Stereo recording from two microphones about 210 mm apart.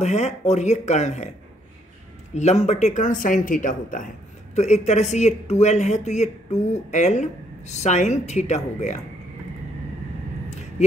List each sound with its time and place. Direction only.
0.0 s speech: 35° left (ahead or behind)
2.3 s speech: 30° left (ahead or behind)